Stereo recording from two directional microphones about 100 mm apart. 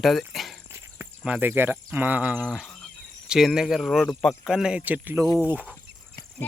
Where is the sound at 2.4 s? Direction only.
5° left (ahead or behind).